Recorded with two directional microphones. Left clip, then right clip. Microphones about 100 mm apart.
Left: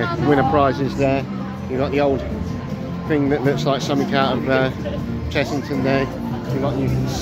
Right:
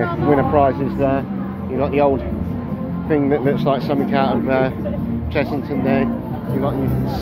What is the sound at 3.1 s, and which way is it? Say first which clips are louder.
Speech: right 2 dB; 30° left (ahead or behind).